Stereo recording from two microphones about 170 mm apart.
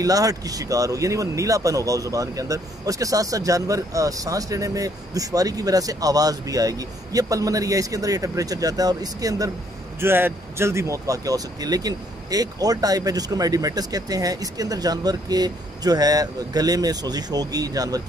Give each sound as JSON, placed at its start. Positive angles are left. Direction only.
{"t": 0.0, "sound": "speech", "side_deg": -20}